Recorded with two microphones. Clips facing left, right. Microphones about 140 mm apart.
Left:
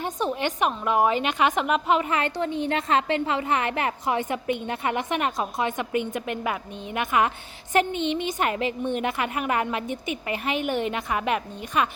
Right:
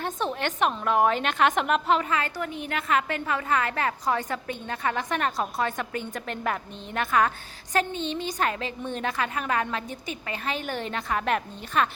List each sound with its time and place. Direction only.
0.0 s a woman's voice: 10° left (ahead or behind)
2.0 s a woman's voice: 25° left (ahead or behind); by 11.9 s 10° left (ahead or behind)